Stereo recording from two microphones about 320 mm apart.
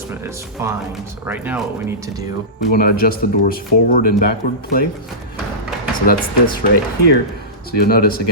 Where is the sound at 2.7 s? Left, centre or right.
Left.